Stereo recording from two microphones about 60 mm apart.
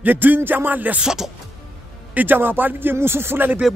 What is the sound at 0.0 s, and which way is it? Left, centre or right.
Speech, right.